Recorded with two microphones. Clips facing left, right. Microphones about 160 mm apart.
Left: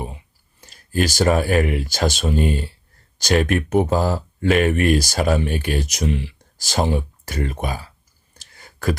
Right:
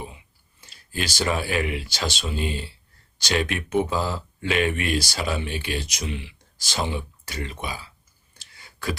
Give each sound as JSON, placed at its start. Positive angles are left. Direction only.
{"t": 0.6, "sound": "speech", "side_deg": 45}